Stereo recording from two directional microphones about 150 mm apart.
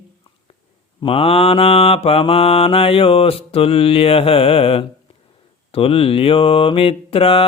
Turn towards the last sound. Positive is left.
turn(degrees=40)  # may be behind; listen again after turning